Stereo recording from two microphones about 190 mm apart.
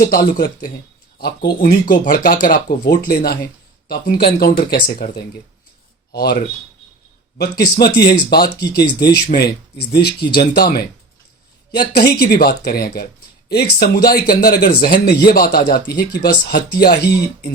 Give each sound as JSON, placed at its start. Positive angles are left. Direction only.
{"t": 0.1, "sound": "speech", "side_deg": 50}
{"t": 12.3, "sound": "speech", "side_deg": 55}